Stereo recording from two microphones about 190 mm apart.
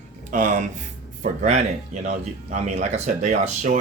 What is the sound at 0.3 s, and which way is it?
Speech, 45° right (ahead or behind).